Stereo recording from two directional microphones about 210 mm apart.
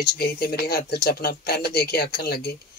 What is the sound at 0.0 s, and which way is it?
Speech, 45° left (ahead or behind).